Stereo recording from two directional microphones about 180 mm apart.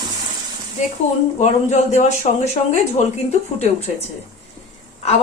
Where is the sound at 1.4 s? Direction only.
40° left (ahead or behind).